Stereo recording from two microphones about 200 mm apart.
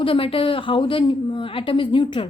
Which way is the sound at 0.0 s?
25° left (ahead or behind).